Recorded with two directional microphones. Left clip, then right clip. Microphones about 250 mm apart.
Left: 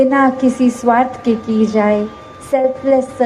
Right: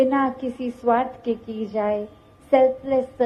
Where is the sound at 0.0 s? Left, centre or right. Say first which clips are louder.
Left 9 dB; right.